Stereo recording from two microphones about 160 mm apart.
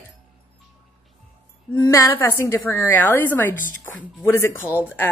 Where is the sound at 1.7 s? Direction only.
20° left (ahead or behind).